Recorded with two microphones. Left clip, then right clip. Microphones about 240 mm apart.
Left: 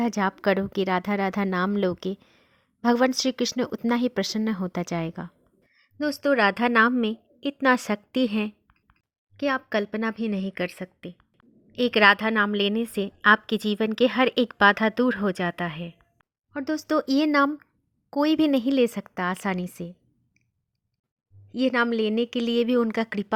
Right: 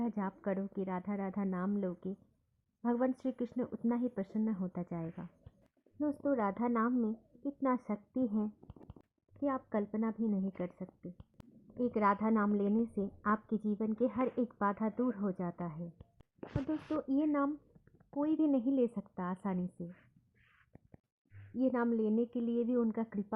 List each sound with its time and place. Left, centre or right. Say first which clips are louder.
0.0 s speech: left 15 dB; left
6.0 s a woman's voice: left 12 dB; left
9.4 s a woman's voice: left 11 dB; left
21.6 s a woman's voice: left 10 dB; left